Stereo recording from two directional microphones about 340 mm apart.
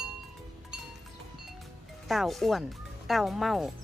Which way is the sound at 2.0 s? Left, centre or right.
Centre.